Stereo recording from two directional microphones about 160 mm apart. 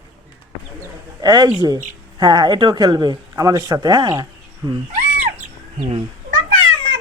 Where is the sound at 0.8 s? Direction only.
25° right (ahead or behind).